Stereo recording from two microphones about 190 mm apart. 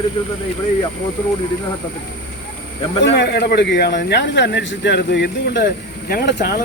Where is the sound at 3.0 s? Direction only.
60° left (ahead or behind).